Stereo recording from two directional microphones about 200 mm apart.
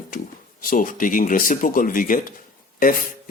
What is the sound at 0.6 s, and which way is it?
A man's voice, 45° left (ahead or behind).